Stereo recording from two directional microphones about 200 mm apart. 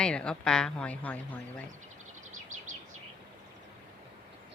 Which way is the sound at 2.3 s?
40° right (ahead or behind).